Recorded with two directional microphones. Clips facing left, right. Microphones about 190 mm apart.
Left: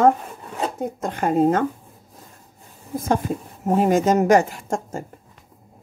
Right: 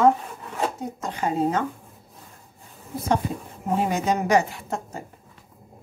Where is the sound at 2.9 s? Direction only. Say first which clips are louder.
Left 2 dB; 45° left (ahead or behind).